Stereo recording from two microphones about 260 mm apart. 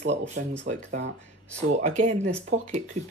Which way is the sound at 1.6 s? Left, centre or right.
Right.